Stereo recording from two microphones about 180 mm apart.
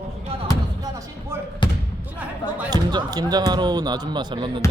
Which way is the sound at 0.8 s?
20° right (ahead or behind).